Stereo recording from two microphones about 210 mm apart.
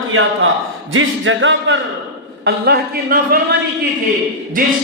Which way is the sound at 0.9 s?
65° right (ahead or behind).